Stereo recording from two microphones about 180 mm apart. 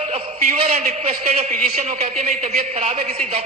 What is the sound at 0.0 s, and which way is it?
A man's voice, 35° right (ahead or behind).